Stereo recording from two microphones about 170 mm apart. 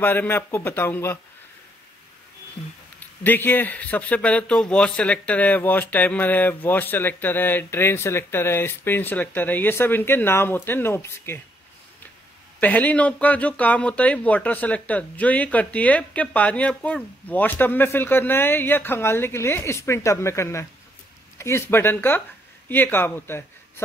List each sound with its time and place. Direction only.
0.0 s a man's voice: 10° left (ahead or behind)
3.3 s a man's voice: 10° left (ahead or behind)
12.5 s a man's voice: 10° left (ahead or behind)